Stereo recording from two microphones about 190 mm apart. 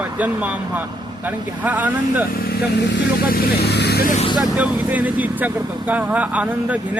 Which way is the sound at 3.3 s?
60° left (ahead or behind).